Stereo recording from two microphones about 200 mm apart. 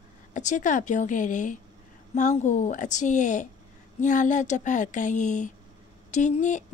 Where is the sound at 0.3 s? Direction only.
35° left (ahead or behind).